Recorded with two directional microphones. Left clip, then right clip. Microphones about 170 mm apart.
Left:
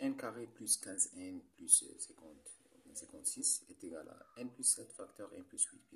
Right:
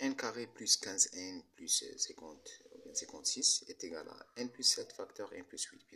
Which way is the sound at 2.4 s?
15° right (ahead or behind).